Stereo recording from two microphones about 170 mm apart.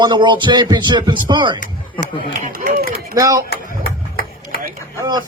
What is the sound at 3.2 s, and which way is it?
Speech, 20° right (ahead or behind).